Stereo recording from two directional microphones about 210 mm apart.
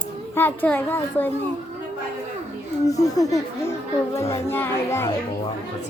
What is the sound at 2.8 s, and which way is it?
Speech, 15° left (ahead or behind).